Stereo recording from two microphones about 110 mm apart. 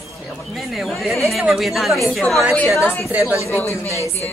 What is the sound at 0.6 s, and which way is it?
A woman's voice, centre (ahead or behind).